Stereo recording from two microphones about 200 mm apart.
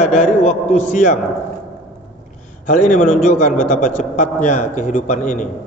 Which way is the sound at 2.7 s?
40° left (ahead or behind).